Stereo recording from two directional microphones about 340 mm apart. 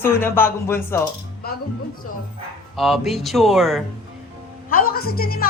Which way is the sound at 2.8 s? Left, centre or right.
Centre.